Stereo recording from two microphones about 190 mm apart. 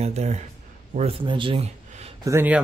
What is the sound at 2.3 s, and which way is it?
Speech, 10° right (ahead or behind).